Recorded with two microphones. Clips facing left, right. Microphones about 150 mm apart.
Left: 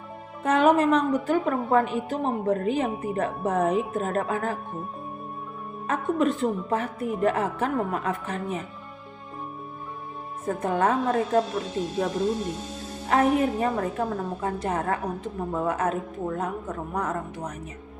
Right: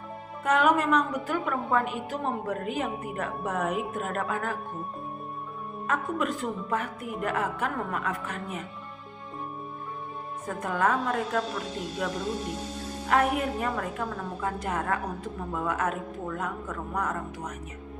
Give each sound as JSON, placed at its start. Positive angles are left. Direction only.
{"t": 0.4, "sound": "a woman's voice", "side_deg": 30}
{"t": 5.9, "sound": "a woman's voice", "side_deg": 30}
{"t": 10.4, "sound": "a woman's voice", "side_deg": 25}